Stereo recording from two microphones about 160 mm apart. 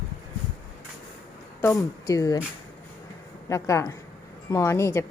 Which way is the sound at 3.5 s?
20° left (ahead or behind).